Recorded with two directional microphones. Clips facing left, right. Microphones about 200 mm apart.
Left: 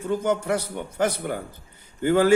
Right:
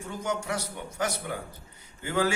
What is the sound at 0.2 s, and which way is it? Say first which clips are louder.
A man's voice: left 7 dB; 55° left (ahead or behind).